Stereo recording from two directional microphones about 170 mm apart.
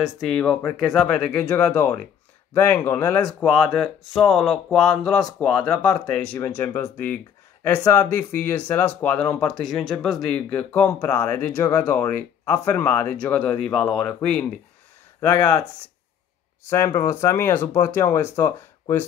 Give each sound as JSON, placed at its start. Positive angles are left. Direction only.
{"t": 0.0, "sound": "speech", "side_deg": 0}
{"t": 15.1, "sound": "speech", "side_deg": 20}
{"t": 16.6, "sound": "speech", "side_deg": 15}